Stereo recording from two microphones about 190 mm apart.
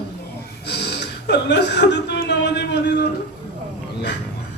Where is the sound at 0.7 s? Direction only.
65° left (ahead or behind).